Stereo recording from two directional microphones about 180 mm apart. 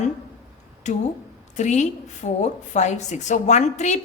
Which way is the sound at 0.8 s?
40° left (ahead or behind).